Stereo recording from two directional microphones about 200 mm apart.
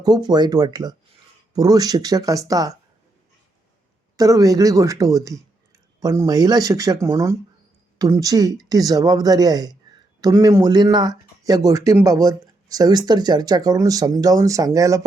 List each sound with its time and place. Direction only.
0.0 s speech: 20° right (ahead or behind)
4.2 s speech: 15° right (ahead or behind)